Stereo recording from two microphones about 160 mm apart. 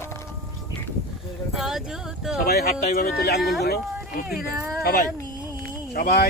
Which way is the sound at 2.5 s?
85° left.